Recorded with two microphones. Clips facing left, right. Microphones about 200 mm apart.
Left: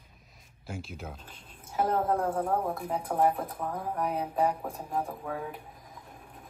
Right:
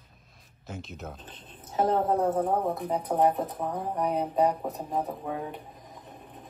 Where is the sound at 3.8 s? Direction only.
5° left (ahead or behind).